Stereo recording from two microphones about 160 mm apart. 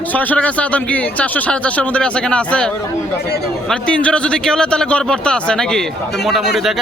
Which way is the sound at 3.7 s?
5° left (ahead or behind).